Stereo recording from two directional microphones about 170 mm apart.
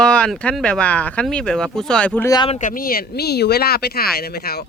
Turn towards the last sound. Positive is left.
turn(degrees=65)  # may be behind; listen again after turning